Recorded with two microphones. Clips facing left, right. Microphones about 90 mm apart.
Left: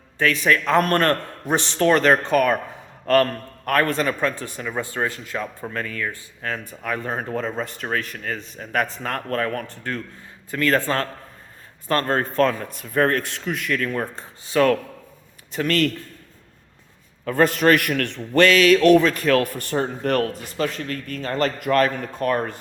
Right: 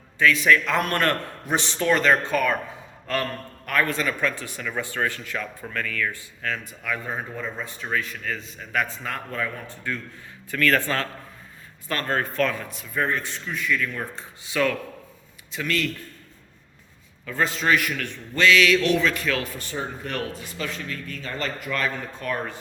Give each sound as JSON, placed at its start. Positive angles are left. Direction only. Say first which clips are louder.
{"t": 0.2, "sound": "a man's voice", "louder": "right 1 dB", "side_deg": 45}
{"t": 3.7, "sound": "a man's voice", "louder": "left 4 dB", "side_deg": 50}
{"t": 7.0, "sound": "speech", "louder": "left 5 dB", "side_deg": 60}
{"t": 7.9, "sound": "a man's voice", "louder": "right 2 dB", "side_deg": 50}
{"t": 10.5, "sound": "speech", "louder": "left 2 dB", "side_deg": 30}
{"t": 12.8, "sound": "a man's voice", "louder": "left 6 dB", "side_deg": 55}
{"t": 17.2, "sound": "a man's voice", "louder": "left 6 dB", "side_deg": 55}